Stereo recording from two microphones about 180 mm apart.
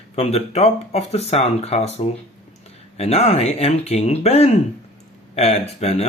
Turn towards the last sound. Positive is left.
turn(degrees=35)  # may be behind; listen again after turning